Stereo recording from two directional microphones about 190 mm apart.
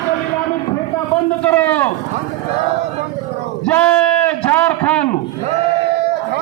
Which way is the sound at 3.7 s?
10° left (ahead or behind).